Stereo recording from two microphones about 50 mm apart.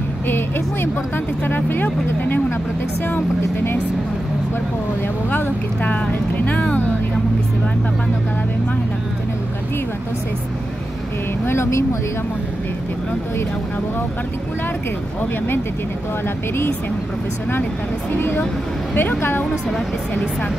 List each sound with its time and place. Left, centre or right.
0.3 s speech: left
5.3 s speech: left
11.4 s speech: left
18.1 s a woman's voice: left